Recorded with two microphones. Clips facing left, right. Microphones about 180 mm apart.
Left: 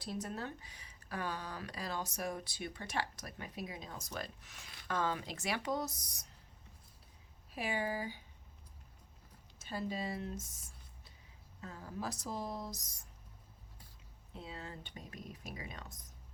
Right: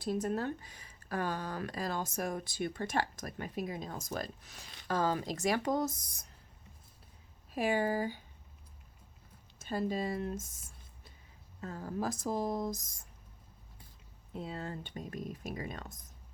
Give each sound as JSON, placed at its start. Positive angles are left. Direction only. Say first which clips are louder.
{"t": 0.0, "sound": "speech", "louder": "right 8 dB", "side_deg": -50}
{"t": 7.5, "sound": "speech", "louder": "right 7 dB", "side_deg": -50}
{"t": 9.6, "sound": "speech", "louder": "right 6 dB", "side_deg": -50}
{"t": 14.3, "sound": "speech", "louder": "right 7 dB", "side_deg": -50}